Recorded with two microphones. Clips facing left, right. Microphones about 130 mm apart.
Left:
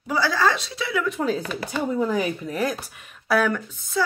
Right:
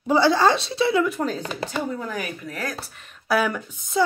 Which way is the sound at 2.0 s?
20° left (ahead or behind).